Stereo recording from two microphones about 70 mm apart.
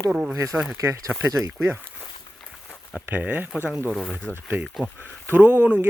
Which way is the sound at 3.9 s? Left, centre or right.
Centre.